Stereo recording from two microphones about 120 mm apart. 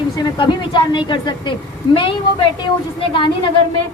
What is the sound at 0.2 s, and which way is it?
A woman's voice, 40° left (ahead or behind).